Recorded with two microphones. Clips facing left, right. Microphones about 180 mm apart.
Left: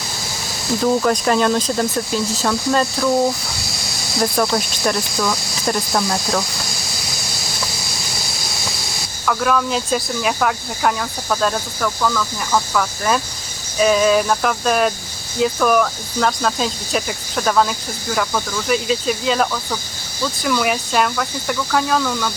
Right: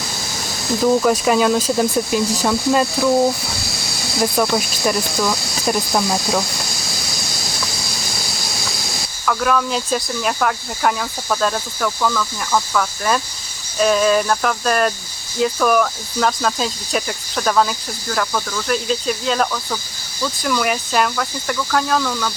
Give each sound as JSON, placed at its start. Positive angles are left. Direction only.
{"t": 0.9, "sound": "speech", "side_deg": -5}
{"t": 4.2, "sound": "speech", "side_deg": -5}
{"t": 9.2, "sound": "speech", "side_deg": 0}